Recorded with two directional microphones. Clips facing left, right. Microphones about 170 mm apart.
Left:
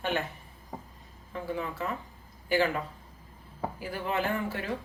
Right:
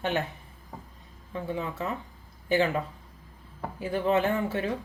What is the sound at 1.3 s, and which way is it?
Speech, 20° right (ahead or behind).